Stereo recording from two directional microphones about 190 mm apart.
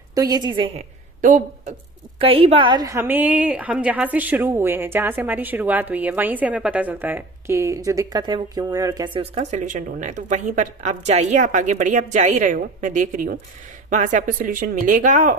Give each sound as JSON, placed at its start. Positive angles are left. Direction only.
{"t": 0.1, "sound": "a woman's voice", "side_deg": -20}
{"t": 2.1, "sound": "a woman's voice", "side_deg": -30}